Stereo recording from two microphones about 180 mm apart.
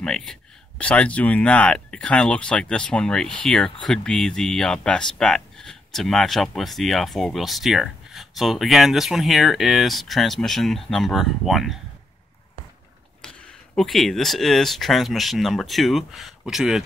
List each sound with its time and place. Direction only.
0.0 s speech: 5° left (ahead or behind)
13.2 s speech: 5° left (ahead or behind)